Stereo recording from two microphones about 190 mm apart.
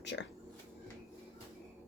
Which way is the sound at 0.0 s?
70° left (ahead or behind).